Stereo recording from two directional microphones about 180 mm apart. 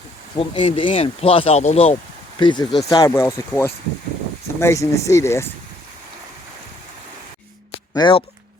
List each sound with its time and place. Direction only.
0.3 s speech: 30° left (ahead or behind)
2.4 s speech: 25° left (ahead or behind)
7.9 s speech: 25° left (ahead or behind)